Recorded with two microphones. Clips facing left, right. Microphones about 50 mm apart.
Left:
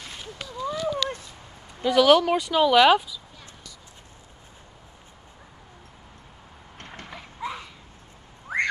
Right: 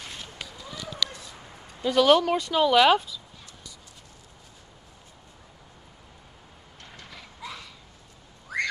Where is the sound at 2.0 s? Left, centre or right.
Centre.